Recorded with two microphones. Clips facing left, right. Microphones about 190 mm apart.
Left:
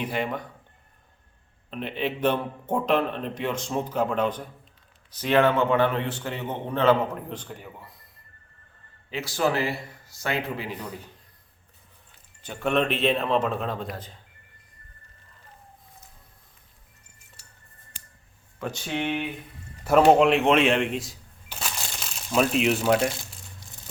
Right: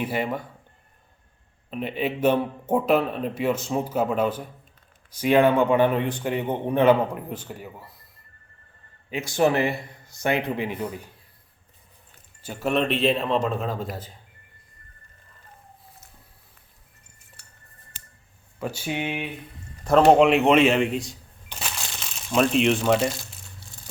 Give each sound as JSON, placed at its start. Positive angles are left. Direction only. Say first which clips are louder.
{"t": 0.0, "sound": "a man's voice", "louder": "right 2 dB", "side_deg": -5}
{"t": 2.0, "sound": "a man's voice", "louder": "right 3 dB", "side_deg": -10}
{"t": 9.1, "sound": "speech", "louder": "right 4 dB", "side_deg": -20}
{"t": 12.4, "sound": "a man's voice", "louder": "even", "side_deg": -5}
{"t": 17.4, "sound": "music", "louder": "right 1 dB", "side_deg": -55}
{"t": 18.6, "sound": "a man's voice", "louder": "right 1 dB", "side_deg": -10}
{"t": 19.8, "sound": "speech", "louder": "right 1 dB", "side_deg": 5}